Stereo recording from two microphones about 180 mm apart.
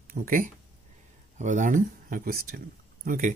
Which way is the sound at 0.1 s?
50° right (ahead or behind).